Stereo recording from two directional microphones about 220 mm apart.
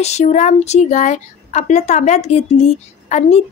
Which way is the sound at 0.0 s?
30° left (ahead or behind).